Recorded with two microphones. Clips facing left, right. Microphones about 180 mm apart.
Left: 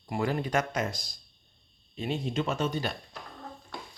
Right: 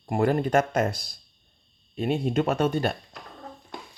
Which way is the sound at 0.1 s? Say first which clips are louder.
Right 7 dB; 50° right (ahead or behind).